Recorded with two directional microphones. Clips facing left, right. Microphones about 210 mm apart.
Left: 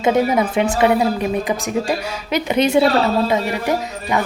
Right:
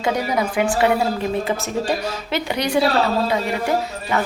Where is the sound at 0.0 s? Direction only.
25° left (ahead or behind).